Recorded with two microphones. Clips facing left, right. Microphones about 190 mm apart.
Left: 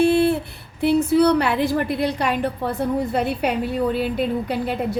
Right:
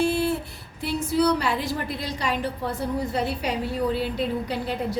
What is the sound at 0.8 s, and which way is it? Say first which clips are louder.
A woman's voice: left 7 dB; 60° left (ahead or behind).